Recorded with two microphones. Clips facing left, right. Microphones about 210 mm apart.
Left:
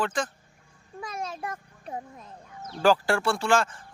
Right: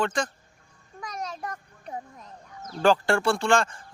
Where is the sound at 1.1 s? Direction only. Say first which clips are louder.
Even; 25° left (ahead or behind).